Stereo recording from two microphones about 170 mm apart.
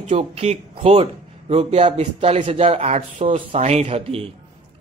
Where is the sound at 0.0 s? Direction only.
35° right (ahead or behind).